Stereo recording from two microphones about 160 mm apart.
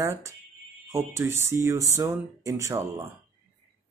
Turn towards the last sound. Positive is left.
turn(degrees=-15)  # may be behind; listen again after turning